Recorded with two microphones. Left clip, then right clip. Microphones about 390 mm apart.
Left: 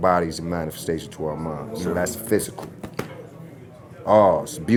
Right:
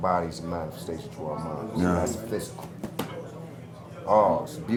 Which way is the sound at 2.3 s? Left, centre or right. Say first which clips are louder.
Left 10 dB; left.